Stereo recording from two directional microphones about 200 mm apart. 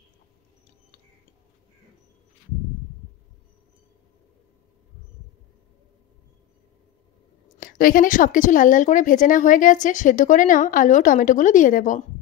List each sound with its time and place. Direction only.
7.6 s speech: 45° left (ahead or behind)